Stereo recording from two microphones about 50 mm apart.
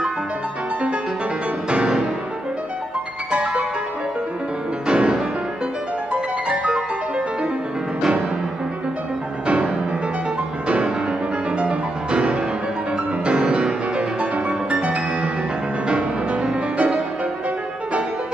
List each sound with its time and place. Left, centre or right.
1.7 s music: right
3.3 s music: right
4.8 s music: centre
11.5 s music: right